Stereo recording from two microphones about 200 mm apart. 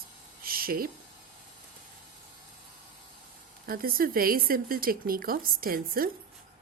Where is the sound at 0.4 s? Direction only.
45° right (ahead or behind).